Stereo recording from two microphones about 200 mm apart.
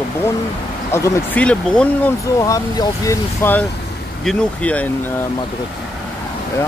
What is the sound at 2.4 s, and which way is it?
Speech, 15° left (ahead or behind).